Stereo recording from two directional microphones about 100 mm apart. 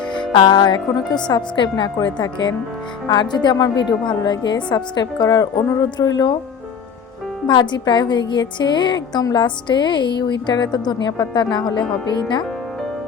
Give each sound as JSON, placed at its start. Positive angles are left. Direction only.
{"t": 0.0, "sound": "music", "side_deg": 50}
{"t": 1.3, "sound": "a woman's voice", "side_deg": 50}
{"t": 7.4, "sound": "a woman's voice", "side_deg": 45}